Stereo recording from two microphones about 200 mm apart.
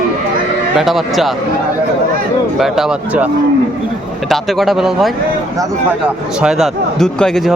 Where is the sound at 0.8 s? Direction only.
Centre (ahead or behind).